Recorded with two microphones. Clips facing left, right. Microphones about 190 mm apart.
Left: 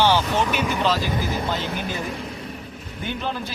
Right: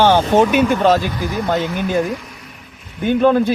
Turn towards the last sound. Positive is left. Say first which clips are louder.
# right 15 dB
turn(degrees=-55)  # may be behind; listen again after turning